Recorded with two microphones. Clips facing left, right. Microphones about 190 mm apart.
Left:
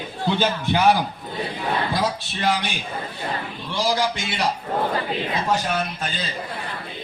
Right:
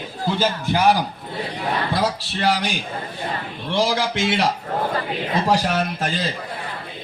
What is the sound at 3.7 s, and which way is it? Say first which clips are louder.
Speech: right 2 dB; 75° right (ahead or behind).